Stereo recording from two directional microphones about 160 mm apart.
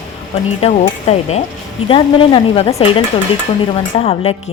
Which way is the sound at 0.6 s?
40° left (ahead or behind).